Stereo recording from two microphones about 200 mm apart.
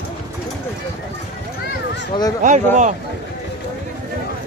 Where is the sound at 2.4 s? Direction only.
40° right (ahead or behind).